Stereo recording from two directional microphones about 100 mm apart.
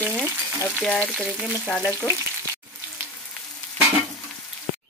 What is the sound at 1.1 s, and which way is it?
Speech, 10° right (ahead or behind).